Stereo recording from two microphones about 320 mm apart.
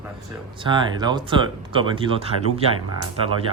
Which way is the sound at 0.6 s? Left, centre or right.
Centre.